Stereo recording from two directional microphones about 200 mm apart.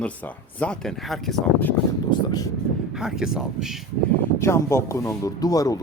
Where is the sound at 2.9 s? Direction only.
5° right (ahead or behind).